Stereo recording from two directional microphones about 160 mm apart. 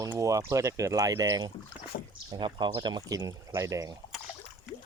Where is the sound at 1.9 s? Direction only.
65° left (ahead or behind).